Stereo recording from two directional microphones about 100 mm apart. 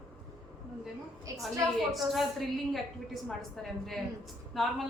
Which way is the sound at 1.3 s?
35° right (ahead or behind).